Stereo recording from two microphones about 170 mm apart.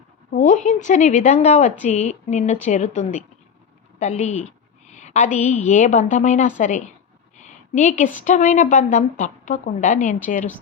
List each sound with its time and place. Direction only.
0.3 s a woman's voice: 50° left (ahead or behind)